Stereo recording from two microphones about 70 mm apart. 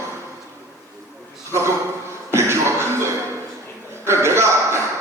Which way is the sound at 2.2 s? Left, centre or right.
Right.